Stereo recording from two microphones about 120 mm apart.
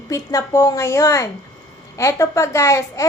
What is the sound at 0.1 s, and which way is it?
A woman's voice, 25° left (ahead or behind).